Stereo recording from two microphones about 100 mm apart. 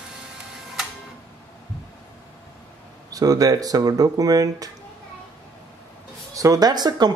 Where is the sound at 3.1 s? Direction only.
40° right (ahead or behind).